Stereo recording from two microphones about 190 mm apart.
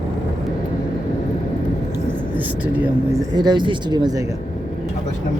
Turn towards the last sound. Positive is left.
turn(degrees=-20)  # may be behind; listen again after turning